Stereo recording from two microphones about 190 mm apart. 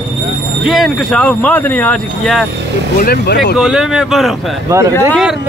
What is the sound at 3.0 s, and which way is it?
Speech, 55° left (ahead or behind).